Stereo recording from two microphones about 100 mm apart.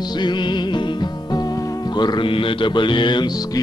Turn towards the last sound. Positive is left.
turn(degrees=45)  # may be behind; listen again after turning